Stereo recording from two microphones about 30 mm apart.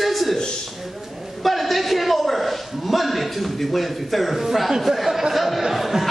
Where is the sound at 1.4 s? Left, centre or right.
Centre.